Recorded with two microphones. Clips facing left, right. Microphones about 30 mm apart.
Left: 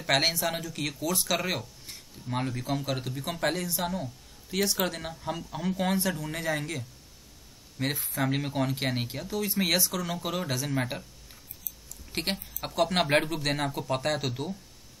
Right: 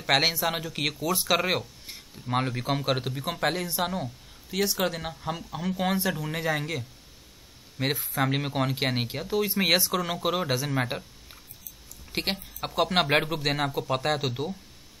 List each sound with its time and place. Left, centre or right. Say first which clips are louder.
0.0 s speech: right 2 dB; centre
0.6 s speech: right 4 dB; right
0.9 s speech: right 3 dB; centre; by 3.2 s right
3.2 s speech: right 2 dB; centre
3.6 s speech: right 2 dB; right
4.5 s speech: right 2 dB; centre
7.9 s speech: right 4 dB; centre
8.2 s a woman's voice: right 1 dB; centre